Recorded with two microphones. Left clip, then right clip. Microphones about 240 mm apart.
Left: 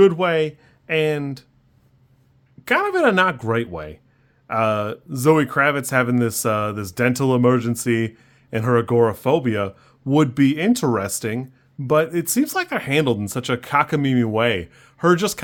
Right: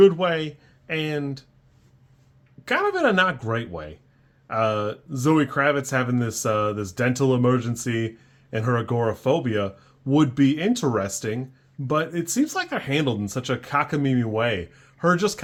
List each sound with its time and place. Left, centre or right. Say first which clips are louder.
0.0 s speech: left 2 dB; left
2.6 s speech: left 4 dB; left